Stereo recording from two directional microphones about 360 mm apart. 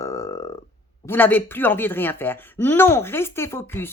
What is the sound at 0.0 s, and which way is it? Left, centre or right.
Burping, centre.